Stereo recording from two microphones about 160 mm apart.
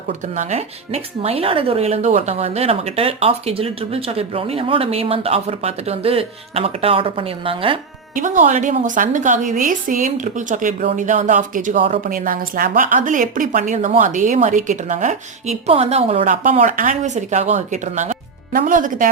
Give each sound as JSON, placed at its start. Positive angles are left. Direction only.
{"t": 0.1, "sound": "speech", "side_deg": -45}
{"t": 8.1, "sound": "speech", "side_deg": -55}
{"t": 16.3, "sound": "speech", "side_deg": -55}